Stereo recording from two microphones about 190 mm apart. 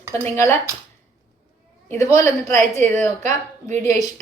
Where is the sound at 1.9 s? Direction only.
15° left (ahead or behind).